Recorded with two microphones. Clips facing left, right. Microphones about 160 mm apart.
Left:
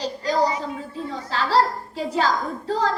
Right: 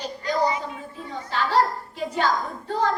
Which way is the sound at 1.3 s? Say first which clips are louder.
Left 1 dB; 90° left.